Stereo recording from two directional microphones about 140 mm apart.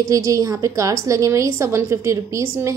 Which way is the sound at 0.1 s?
25° right (ahead or behind).